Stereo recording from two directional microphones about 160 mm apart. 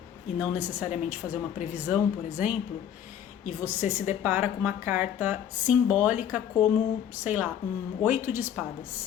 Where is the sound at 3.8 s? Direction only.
50° left (ahead or behind).